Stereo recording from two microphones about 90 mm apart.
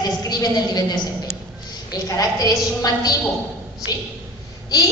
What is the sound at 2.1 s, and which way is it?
A woman's voice, 40° left (ahead or behind).